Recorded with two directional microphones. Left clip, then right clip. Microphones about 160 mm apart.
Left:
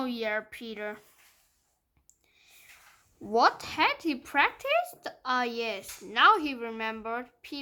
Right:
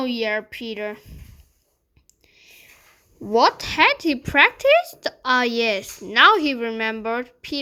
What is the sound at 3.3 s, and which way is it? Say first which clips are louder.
A woman's voice: right 7 dB; 15° right (ahead or behind).